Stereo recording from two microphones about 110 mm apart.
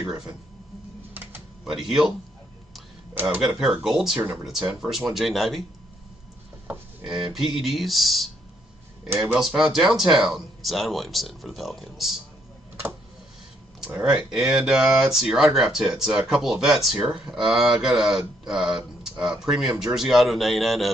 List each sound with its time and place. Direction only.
0.0 s speech: 5° right (ahead or behind)
1.1 s typing: 20° right (ahead or behind)
1.8 s speech: 5° right (ahead or behind)
3.5 s speech: 5° right (ahead or behind)
7.3 s speech: centre (ahead or behind)
13.8 s speech: 15° right (ahead or behind)